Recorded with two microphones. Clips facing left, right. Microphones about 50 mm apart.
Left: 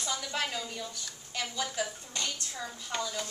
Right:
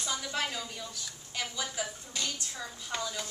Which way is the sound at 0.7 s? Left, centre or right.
Centre.